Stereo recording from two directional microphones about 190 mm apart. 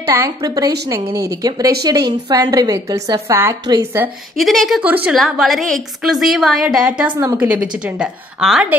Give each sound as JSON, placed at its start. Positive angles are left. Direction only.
{"t": 0.1, "sound": "a woman's voice", "side_deg": -20}
{"t": 4.4, "sound": "a woman's voice", "side_deg": 0}